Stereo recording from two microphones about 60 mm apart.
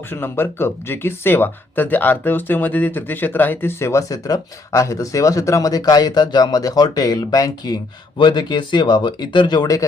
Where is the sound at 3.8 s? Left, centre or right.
Left.